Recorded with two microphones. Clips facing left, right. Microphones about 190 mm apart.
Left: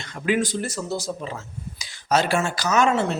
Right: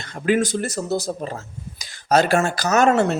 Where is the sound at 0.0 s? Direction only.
40° right (ahead or behind).